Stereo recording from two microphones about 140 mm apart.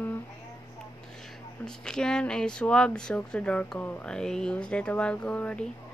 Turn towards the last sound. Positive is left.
turn(degrees=10)  # may be behind; listen again after turning